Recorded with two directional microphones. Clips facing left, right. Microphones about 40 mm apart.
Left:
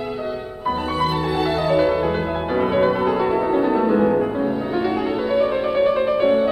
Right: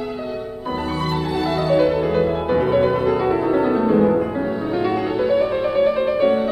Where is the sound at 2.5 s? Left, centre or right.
Centre.